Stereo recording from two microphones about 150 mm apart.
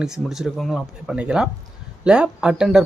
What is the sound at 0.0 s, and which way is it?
Speech, 5° right (ahead or behind).